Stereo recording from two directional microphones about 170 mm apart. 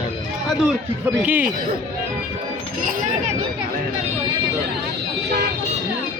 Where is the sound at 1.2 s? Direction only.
10° right (ahead or behind).